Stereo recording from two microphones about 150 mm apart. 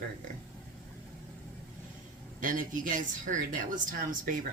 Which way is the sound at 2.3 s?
60° right (ahead or behind).